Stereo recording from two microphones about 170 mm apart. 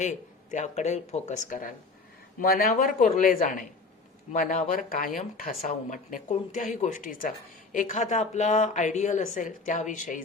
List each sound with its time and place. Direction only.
0.5 s speech: 45° left (ahead or behind)